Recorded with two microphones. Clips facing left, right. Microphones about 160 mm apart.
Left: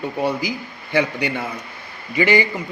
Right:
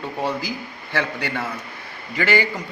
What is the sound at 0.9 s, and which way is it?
A man's voice, 15° left (ahead or behind).